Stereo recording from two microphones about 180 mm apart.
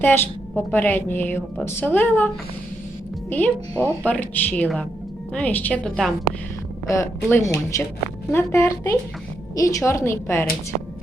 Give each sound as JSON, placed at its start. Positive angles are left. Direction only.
{"t": 0.0, "sound": "a woman's voice", "side_deg": 10}
{"t": 6.9, "sound": "a woman's voice", "side_deg": 15}